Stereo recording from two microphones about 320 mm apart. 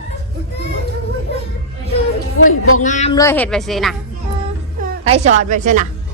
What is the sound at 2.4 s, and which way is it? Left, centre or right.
Speech, left.